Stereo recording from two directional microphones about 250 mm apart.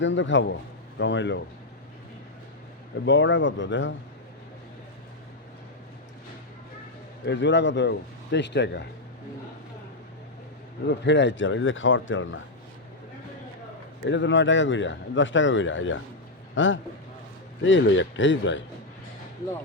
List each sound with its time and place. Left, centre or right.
0.0 s speech: left
3.1 s speech: left
7.3 s speech: left
10.8 s speech: left
14.0 s speech: left